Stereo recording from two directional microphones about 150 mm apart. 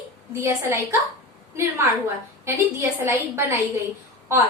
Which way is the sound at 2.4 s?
20° right (ahead or behind).